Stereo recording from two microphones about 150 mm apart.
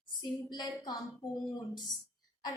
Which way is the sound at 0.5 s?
30° left (ahead or behind).